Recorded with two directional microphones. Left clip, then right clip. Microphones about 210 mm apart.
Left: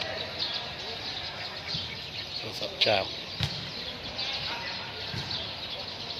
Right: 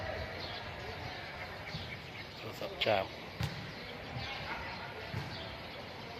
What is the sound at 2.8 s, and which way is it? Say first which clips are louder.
Speech: left 6 dB; 5° left (ahead or behind).